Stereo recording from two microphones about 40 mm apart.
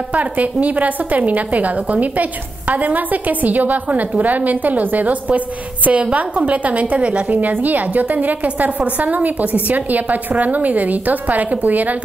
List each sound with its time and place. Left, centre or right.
0.1 s a woman's voice: right
7.0 s a woman's voice: right
7.3 s a woman's voice: right